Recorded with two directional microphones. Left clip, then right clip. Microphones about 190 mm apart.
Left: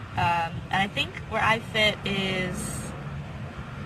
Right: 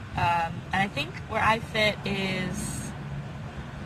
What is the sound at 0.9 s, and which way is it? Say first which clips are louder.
A man's voice: left 2 dB; 5° right (ahead or behind).